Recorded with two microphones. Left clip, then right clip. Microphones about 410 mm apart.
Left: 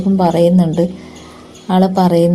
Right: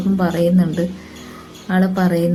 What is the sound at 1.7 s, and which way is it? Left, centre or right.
Speech, right.